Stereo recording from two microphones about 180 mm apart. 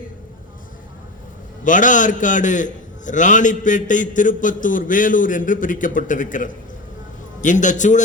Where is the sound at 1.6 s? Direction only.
45° left (ahead or behind).